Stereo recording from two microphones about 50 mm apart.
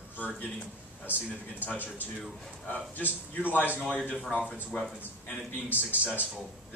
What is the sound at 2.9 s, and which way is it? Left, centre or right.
Speech, left.